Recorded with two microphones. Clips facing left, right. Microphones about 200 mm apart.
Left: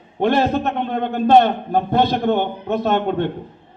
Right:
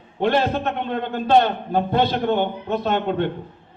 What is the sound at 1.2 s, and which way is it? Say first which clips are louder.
A man's voice: left 4 dB; 50° left (ahead or behind).